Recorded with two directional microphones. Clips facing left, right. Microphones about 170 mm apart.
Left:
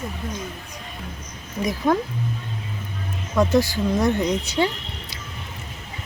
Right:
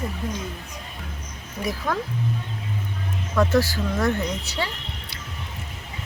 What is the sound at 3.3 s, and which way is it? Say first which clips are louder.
Speech: left 2 dB; 15° left (ahead or behind).